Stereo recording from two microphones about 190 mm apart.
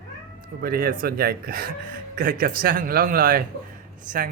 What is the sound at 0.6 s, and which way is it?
Speech, 50° right (ahead or behind).